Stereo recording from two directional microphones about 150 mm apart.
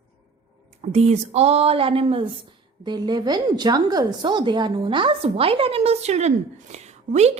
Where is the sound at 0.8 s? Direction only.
45° right (ahead or behind).